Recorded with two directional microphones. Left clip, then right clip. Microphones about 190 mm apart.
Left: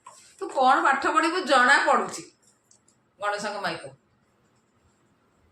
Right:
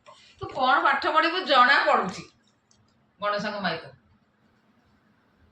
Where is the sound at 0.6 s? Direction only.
35° left (ahead or behind).